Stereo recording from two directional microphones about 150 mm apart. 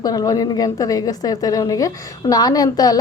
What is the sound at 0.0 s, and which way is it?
A woman's voice, 25° left (ahead or behind).